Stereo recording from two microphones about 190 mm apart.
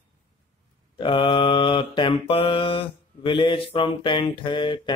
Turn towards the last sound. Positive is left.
turn(degrees=25)  # may be behind; listen again after turning